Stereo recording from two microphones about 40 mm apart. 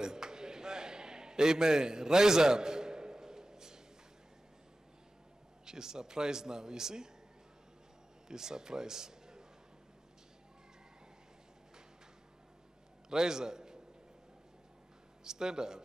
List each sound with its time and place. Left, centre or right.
0.0 s a sound: centre
5.7 s speech: centre
8.3 s a man's voice: centre
13.1 s a man's voice: centre
15.2 s speech: centre